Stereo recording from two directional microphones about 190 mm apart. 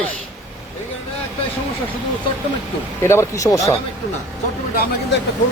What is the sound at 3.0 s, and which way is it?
Speech, 15° left (ahead or behind).